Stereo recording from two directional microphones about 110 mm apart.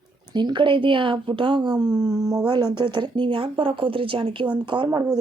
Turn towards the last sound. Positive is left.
turn(degrees=-40)  # may be behind; listen again after turning